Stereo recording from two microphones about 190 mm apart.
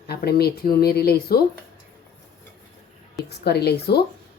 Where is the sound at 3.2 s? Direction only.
60° left (ahead or behind).